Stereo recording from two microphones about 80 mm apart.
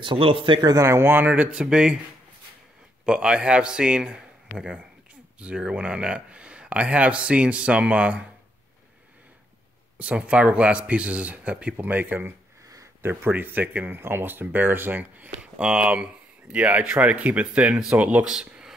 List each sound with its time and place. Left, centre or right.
0.0 s speech: right
0.6 s speech: right
0.8 s speech: right; by 2.0 s centre
3.1 s speech: centre
9.9 s speech: centre
12.6 s a sound: right
13.0 s speech: right
18.3 s a sound: centre